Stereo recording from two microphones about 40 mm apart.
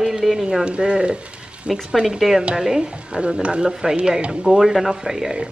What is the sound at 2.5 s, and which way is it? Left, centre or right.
A woman's voice, centre.